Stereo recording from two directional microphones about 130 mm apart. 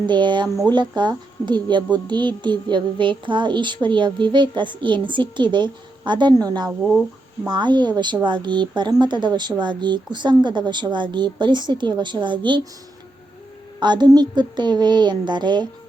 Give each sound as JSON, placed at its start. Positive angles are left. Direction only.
{"t": 0.0, "sound": "a woman's voice", "side_deg": -35}
{"t": 6.7, "sound": "speech", "side_deg": -10}
{"t": 7.4, "sound": "a woman's voice", "side_deg": -35}
{"t": 13.7, "sound": "a woman's voice", "side_deg": -35}